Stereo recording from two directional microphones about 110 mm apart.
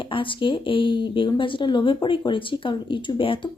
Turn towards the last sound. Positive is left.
turn(degrees=50)  # may be behind; listen again after turning